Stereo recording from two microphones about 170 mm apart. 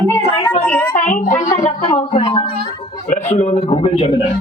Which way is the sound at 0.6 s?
10° left (ahead or behind).